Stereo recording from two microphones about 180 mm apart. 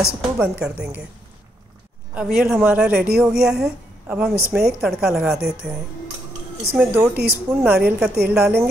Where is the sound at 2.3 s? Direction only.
Centre (ahead or behind).